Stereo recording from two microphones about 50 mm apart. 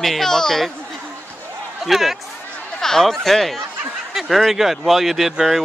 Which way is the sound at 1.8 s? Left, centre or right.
Centre.